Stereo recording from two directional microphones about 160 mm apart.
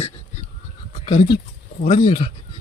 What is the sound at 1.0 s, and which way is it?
Speech, 30° left (ahead or behind).